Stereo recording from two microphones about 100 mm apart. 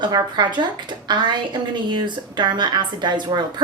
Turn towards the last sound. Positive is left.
turn(degrees=-50)  # may be behind; listen again after turning